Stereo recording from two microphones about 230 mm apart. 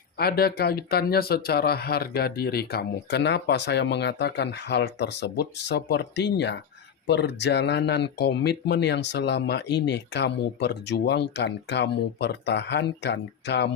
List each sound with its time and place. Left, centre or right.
0.2 s speech: left